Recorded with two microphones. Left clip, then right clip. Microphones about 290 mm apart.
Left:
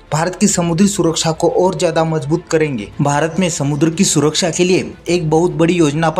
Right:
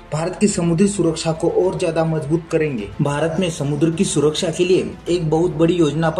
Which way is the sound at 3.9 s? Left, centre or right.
Left.